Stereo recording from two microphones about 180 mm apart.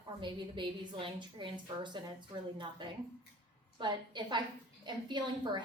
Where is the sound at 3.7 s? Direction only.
25° right (ahead or behind).